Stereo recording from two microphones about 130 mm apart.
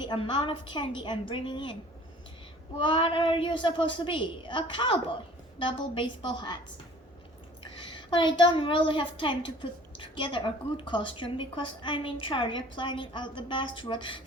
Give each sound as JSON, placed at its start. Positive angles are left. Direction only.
{"t": 0.0, "sound": "a woman's voice", "side_deg": 40}
{"t": 2.8, "sound": "a woman's voice", "side_deg": 40}
{"t": 7.9, "sound": "a woman's voice", "side_deg": 40}